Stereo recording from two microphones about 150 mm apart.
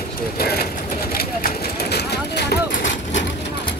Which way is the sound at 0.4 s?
90° left.